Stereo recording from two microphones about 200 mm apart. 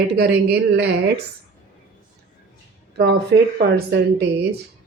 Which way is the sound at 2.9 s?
55° right (ahead or behind).